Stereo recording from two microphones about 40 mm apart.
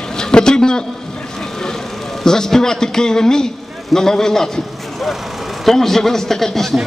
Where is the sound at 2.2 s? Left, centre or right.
Centre.